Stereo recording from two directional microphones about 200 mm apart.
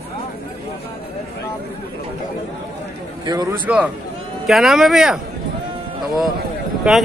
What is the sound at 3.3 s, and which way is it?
Speech, 20° right (ahead or behind).